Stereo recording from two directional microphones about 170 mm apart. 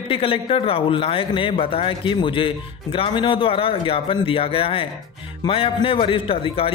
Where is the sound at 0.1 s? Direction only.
35° left (ahead or behind).